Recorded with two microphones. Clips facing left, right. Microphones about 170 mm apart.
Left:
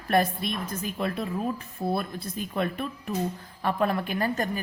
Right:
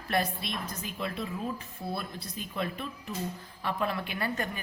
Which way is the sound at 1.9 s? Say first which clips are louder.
Left 7 dB; 55° left (ahead or behind).